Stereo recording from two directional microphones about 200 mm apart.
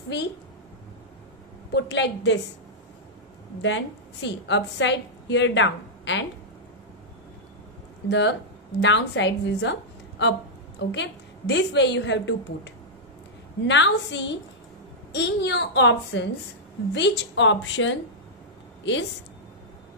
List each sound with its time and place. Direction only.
1.7 s a woman's voice: 60° left (ahead or behind)
3.6 s a woman's voice: 65° left (ahead or behind)
8.1 s a woman's voice: 60° left (ahead or behind)